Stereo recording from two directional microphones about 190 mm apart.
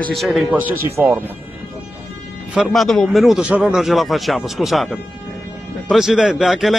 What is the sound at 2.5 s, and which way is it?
A man's voice, centre (ahead or behind).